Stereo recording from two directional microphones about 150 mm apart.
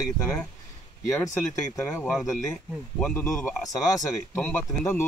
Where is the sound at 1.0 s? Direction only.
20° left (ahead or behind).